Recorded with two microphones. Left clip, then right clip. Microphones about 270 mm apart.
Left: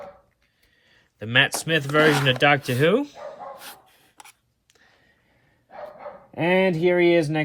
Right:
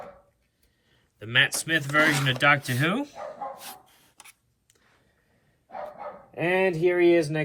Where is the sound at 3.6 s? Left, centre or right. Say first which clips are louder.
Left 1 dB; left.